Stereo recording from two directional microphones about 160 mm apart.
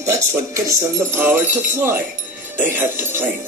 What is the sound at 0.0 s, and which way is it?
Speech, 20° right (ahead or behind).